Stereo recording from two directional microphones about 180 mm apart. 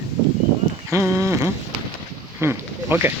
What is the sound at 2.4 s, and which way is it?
Speech, 10° right (ahead or behind).